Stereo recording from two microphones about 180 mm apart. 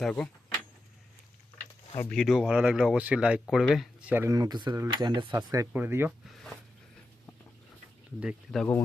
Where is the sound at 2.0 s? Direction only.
5° left (ahead or behind); by 6.2 s 15° right (ahead or behind).